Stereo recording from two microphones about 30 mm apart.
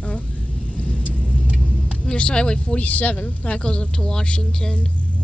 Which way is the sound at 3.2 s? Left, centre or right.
Left.